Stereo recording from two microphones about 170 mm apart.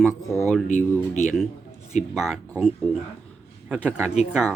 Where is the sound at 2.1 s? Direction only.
Centre (ahead or behind).